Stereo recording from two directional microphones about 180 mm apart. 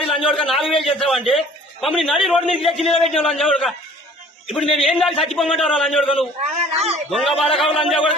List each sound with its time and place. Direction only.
0.0 s a man's voice: centre (ahead or behind)
6.7 s a man's voice: 35° right (ahead or behind)
7.1 s a man's voice: centre (ahead or behind)